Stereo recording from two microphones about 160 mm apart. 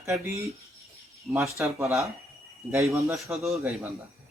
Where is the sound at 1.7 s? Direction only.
15° right (ahead or behind).